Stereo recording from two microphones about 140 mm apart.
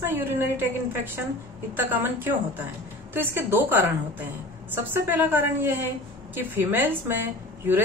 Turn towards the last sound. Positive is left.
turn(degrees=-15)  # may be behind; listen again after turning